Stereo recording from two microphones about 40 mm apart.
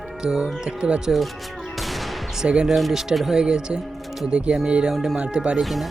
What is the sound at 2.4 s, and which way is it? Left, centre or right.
Speech, right.